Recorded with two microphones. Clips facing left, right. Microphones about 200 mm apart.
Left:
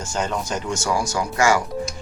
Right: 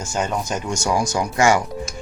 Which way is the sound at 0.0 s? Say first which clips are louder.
Right 1 dB; 10° right (ahead or behind).